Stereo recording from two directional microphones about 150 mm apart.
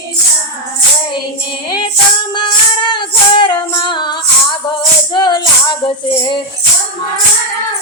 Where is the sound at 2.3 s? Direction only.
30° left (ahead or behind).